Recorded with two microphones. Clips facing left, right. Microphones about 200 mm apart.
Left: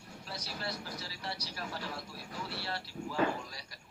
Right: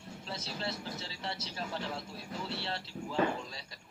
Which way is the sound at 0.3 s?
25° right (ahead or behind).